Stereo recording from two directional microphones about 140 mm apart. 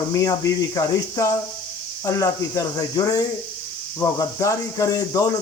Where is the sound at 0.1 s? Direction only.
25° left (ahead or behind).